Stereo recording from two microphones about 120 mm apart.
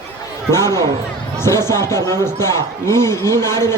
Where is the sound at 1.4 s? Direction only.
20° left (ahead or behind).